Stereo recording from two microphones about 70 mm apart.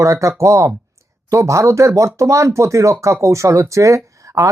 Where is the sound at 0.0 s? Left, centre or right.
Right.